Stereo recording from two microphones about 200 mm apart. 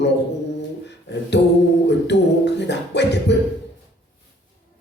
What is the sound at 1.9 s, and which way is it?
Speech, 60° left (ahead or behind).